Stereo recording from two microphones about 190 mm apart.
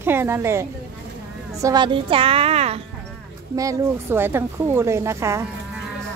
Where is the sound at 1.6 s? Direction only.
25° right (ahead or behind).